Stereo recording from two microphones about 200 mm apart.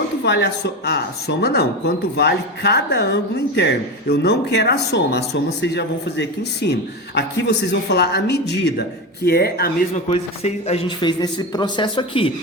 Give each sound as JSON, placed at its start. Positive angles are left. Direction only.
{"t": 0.3, "sound": "speech", "side_deg": 55}
{"t": 9.9, "sound": "a man's voice", "side_deg": 35}